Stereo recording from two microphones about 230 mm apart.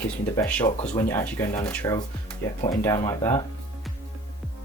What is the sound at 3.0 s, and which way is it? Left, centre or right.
Speech, centre.